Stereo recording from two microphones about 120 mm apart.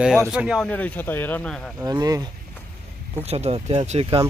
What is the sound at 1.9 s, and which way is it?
Speech, 30° right (ahead or behind).